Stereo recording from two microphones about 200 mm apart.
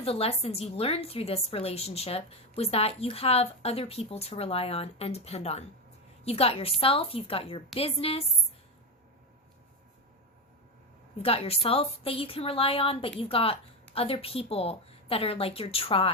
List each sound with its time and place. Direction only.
0.0 s a woman's voice: 30° left (ahead or behind)
11.2 s a woman's voice: 30° left (ahead or behind)